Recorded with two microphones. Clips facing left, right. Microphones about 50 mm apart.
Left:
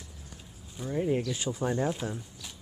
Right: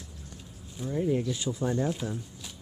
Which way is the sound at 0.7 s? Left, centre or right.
Centre.